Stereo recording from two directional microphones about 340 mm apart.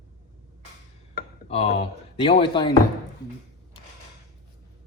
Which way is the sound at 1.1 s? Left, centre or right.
Centre.